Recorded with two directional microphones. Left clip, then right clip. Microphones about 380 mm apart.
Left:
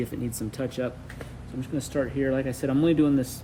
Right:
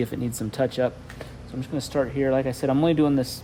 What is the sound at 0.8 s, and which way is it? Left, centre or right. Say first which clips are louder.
Speech: right 6 dB; right.